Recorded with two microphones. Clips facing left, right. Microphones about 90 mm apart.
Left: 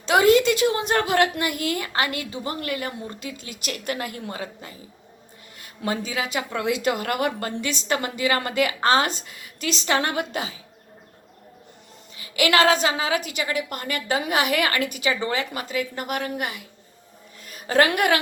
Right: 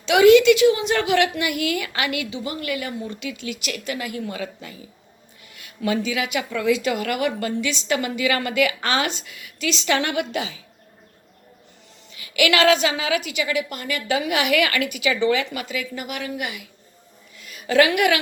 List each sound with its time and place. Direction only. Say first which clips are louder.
0.0 s a woman's voice: right 4 dB; 40° left (ahead or behind)
6.6 s a woman's voice: right 3 dB; 55° left (ahead or behind)
12.1 s a woman's voice: even; 35° left (ahead or behind)
17.4 s a sound: right 2 dB; 40° left (ahead or behind)